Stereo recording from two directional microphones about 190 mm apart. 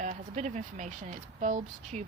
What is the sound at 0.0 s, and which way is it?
Speech, 40° right (ahead or behind).